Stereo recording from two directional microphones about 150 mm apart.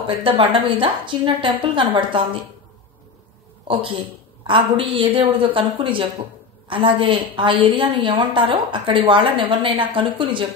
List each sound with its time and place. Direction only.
0.0 s a woman's voice: 35° right (ahead or behind)
4.5 s a woman's voice: 35° right (ahead or behind)